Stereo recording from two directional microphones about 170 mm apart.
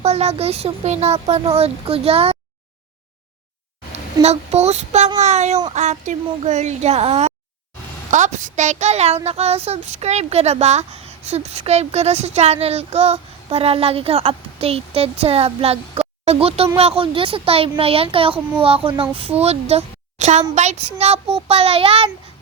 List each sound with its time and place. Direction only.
0.0 s a child's voice: 40° right (ahead or behind)
4.2 s a child's voice: 40° right (ahead or behind)